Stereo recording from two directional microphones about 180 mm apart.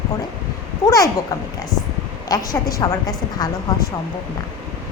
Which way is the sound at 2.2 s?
20° left (ahead or behind).